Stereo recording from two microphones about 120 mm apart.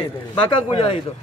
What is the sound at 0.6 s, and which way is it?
Speech, 45° left (ahead or behind).